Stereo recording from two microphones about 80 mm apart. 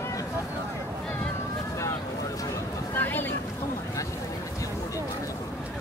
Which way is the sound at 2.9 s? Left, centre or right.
Left.